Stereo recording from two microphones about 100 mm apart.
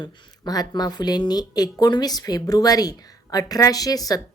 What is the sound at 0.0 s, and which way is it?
Speech, 40° left (ahead or behind).